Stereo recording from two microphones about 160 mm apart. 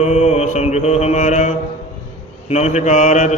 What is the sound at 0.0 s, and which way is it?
Mantra, 45° left (ahead or behind).